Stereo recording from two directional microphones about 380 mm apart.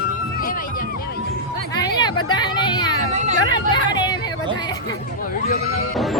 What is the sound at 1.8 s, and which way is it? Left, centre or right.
Speech, centre.